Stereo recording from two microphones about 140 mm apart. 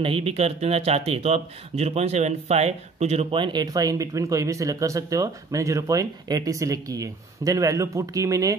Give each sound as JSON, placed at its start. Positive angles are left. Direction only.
{"t": 0.0, "sound": "speech", "side_deg": -40}